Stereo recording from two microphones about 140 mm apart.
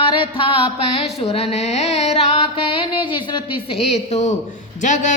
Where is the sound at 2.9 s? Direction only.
35° left (ahead or behind).